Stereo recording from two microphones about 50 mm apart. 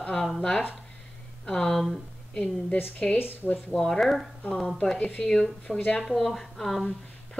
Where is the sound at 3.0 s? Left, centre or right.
Centre.